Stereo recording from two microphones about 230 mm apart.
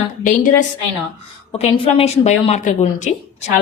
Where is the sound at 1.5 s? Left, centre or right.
Left.